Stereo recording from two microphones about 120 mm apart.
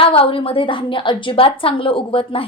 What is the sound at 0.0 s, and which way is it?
A woman's voice, 50° left (ahead or behind).